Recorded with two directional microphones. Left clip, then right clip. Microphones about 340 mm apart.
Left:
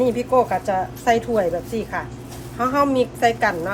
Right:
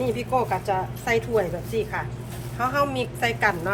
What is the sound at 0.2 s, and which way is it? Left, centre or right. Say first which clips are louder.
A woman's voice: left 6 dB; left.